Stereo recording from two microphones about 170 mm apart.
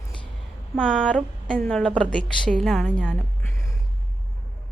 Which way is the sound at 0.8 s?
5° left (ahead or behind).